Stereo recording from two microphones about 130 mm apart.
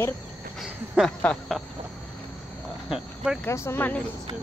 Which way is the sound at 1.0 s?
10° right (ahead or behind).